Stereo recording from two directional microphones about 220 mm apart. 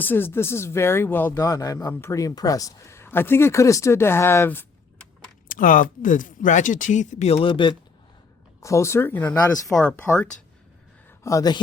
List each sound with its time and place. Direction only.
0.0 s speech: 10° left (ahead or behind)
5.5 s speech: 40° left (ahead or behind); by 11.6 s 15° left (ahead or behind)